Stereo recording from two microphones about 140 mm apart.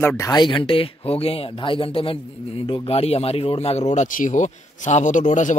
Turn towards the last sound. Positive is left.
turn(degrees=65)  # may be behind; listen again after turning